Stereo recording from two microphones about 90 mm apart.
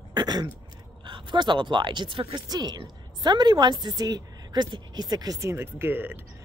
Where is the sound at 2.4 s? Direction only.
50° right (ahead or behind).